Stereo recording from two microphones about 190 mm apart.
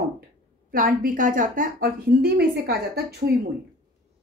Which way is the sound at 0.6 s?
50° right (ahead or behind).